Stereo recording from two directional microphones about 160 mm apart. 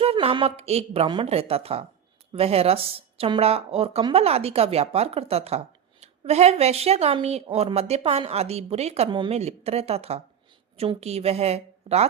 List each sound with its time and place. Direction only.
0.0 s speech: 35° right (ahead or behind)